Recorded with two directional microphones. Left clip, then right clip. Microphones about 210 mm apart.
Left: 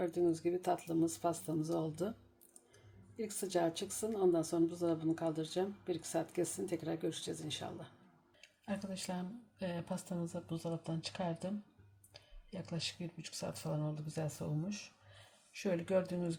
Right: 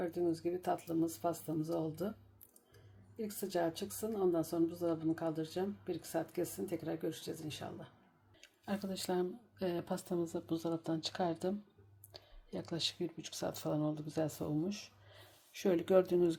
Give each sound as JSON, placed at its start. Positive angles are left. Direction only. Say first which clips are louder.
{"t": 0.0, "sound": "speech", "louder": "left 2 dB", "side_deg": -5}
{"t": 3.2, "sound": "speech", "louder": "left 1 dB", "side_deg": -5}
{"t": 8.6, "sound": "speech", "louder": "right 3 dB", "side_deg": -35}
{"t": 12.5, "sound": "speech", "louder": "right 4 dB", "side_deg": -40}
{"t": 15.5, "sound": "speech", "louder": "right 5 dB", "side_deg": -40}